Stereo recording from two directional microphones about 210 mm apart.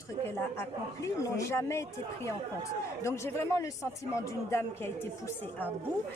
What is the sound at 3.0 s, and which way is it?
A woman's voice, 15° left (ahead or behind).